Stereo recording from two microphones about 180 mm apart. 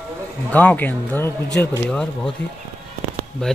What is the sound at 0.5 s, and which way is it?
A man's voice, 10° left (ahead or behind).